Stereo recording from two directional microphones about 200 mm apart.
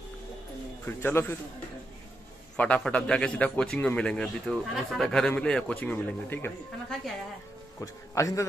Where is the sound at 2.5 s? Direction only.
5° left (ahead or behind).